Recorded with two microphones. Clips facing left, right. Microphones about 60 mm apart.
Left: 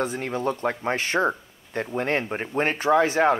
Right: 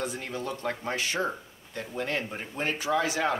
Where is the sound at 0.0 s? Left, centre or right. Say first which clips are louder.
Left 7 dB; left.